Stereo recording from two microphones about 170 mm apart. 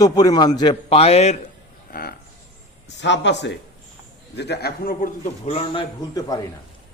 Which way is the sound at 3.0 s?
90° left.